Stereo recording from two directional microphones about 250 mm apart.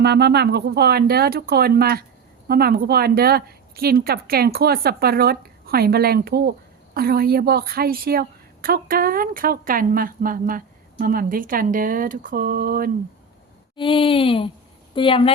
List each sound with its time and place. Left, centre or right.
0.0 s a woman's voice: right
13.7 s speech: centre